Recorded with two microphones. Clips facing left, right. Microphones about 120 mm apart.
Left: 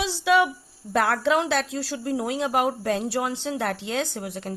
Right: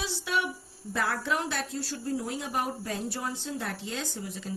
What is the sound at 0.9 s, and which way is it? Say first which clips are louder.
Speech: left 8 dB; 75° left (ahead or behind).